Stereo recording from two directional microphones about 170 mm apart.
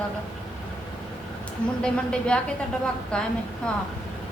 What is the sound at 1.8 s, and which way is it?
Speech, 5° left (ahead or behind).